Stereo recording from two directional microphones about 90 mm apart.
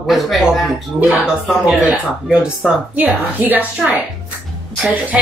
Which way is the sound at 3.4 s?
20° right (ahead or behind).